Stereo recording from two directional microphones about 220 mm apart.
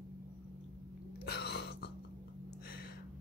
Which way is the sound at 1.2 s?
50° left (ahead or behind).